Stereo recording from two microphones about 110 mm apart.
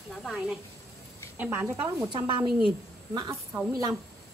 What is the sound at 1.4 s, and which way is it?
Speech, 20° right (ahead or behind).